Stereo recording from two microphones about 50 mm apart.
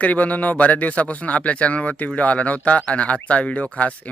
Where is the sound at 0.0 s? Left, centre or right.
Left.